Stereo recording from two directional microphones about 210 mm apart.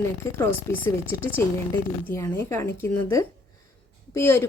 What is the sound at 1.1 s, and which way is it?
A woman's voice, 10° left (ahead or behind).